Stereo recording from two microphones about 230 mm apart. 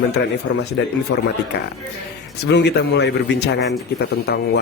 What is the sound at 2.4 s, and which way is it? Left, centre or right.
Speech, left.